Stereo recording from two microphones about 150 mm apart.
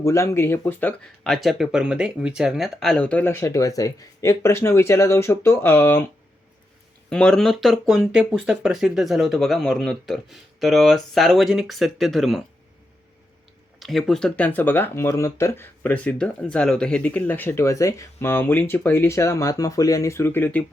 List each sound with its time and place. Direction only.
0.0 s speech: 20° left (ahead or behind)
7.1 s speech: 5° left (ahead or behind)
13.7 s speech: centre (ahead or behind)